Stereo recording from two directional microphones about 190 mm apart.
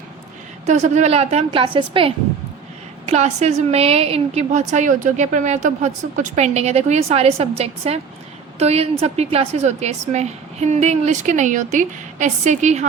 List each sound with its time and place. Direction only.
0.6 s a woman's voice: 35° right (ahead or behind)